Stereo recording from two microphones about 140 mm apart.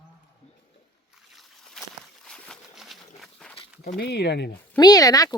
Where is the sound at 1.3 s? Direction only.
Centre (ahead or behind).